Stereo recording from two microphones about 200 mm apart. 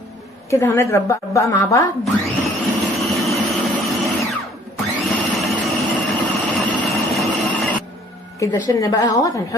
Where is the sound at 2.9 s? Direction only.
Centre (ahead or behind).